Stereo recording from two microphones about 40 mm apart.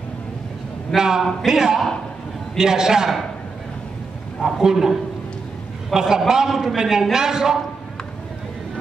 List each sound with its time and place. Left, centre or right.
0.9 s a man's voice: centre
4.5 s a man's voice: centre
5.9 s a man's voice: centre
6.5 s a man's voice: centre
6.8 s a man's voice: centre